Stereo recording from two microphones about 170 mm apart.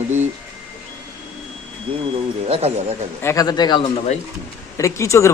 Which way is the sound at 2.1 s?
35° right (ahead or behind).